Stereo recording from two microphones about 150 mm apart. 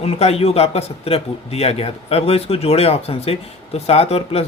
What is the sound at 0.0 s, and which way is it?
Speech, 45° left (ahead or behind).